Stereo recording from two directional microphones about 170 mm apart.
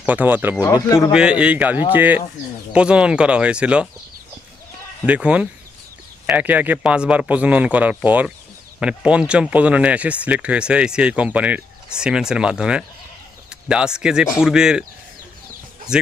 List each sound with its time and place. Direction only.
0.0 s speech: 10° right (ahead or behind)
0.6 s speech: 20° left (ahead or behind)
1.1 s speech: 5° right (ahead or behind)
5.0 s speech: 5° right (ahead or behind)
15.9 s speech: 5° right (ahead or behind)